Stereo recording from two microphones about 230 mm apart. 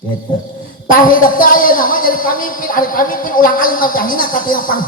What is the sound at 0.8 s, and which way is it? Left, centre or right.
Speech, left.